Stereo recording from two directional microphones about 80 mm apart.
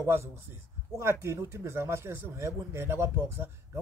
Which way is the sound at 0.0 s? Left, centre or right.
Right.